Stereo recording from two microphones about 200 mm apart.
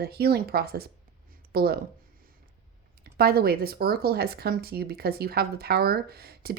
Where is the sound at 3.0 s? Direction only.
50° right (ahead or behind).